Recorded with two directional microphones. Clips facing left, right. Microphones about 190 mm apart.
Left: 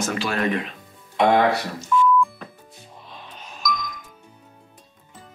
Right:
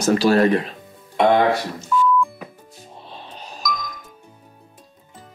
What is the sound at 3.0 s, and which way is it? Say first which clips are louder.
Music: right 4 dB; 30° right (ahead or behind).